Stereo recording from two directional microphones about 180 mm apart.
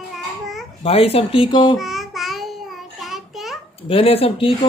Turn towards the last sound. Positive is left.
turn(degrees=30)  # may be behind; listen again after turning